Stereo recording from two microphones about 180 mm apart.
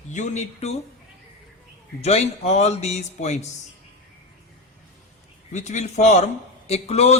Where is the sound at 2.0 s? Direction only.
35° left (ahead or behind).